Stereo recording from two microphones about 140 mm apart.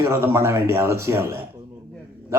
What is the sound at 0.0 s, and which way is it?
Speech, 20° right (ahead or behind).